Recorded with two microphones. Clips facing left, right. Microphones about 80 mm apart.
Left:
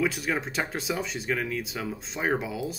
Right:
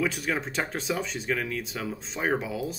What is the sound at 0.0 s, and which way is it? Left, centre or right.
Speech, centre.